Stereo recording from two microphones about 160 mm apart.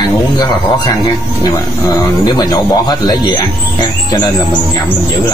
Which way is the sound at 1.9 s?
25° left (ahead or behind).